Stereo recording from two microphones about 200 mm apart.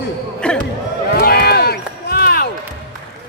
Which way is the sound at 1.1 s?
50° left (ahead or behind).